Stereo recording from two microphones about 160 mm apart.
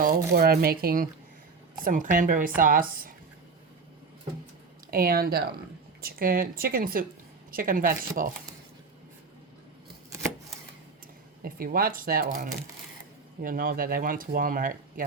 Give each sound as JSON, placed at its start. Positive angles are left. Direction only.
{"t": 0.0, "sound": "speech", "side_deg": -70}
{"t": 1.8, "sound": "speech", "side_deg": -55}
{"t": 4.9, "sound": "speech", "side_deg": -65}
{"t": 11.4, "sound": "speech", "side_deg": -65}